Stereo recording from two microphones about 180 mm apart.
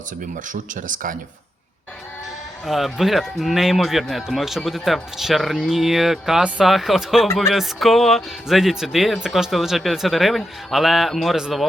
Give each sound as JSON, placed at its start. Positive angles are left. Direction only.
{"t": 0.4, "sound": "speech", "side_deg": -45}
{"t": 2.6, "sound": "speech", "side_deg": 0}